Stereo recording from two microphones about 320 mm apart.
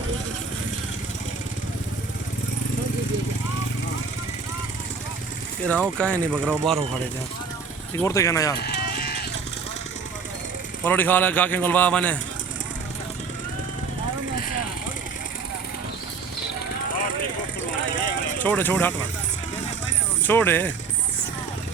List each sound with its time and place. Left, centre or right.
5.6 s speech: centre
8.0 s speech: centre
8.5 s vehicle: left
10.8 s speech: centre
18.3 s speech: centre
20.2 s speech: centre